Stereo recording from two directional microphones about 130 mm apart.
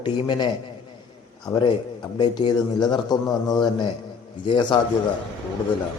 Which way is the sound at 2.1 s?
35° left (ahead or behind).